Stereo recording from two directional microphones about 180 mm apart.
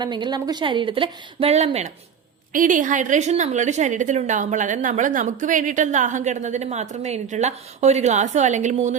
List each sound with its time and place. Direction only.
0.0 s a woman's voice: 25° right (ahead or behind)
2.5 s a woman's voice: 45° right (ahead or behind)